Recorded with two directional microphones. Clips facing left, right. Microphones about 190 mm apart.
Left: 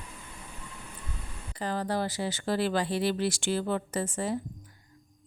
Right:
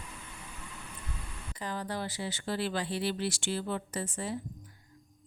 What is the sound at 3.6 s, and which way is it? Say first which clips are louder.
Speech: left 5 dB; 90° left.